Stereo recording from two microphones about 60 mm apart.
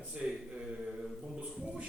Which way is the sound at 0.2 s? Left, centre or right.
Centre.